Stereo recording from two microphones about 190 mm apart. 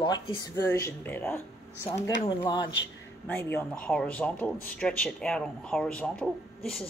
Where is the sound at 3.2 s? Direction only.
10° left (ahead or behind).